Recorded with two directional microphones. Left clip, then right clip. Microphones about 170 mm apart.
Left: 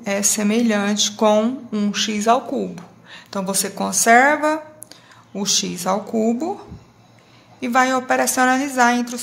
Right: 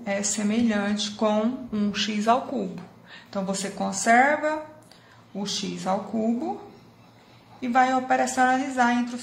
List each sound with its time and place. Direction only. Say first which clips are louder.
0.0 s speech: left 7 dB; 30° left (ahead or behind)
7.6 s speech: left 4 dB; 35° left (ahead or behind)